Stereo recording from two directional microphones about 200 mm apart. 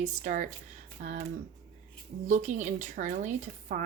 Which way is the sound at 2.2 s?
40° right (ahead or behind).